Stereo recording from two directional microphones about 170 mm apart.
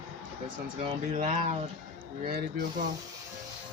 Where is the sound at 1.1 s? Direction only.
45° right (ahead or behind).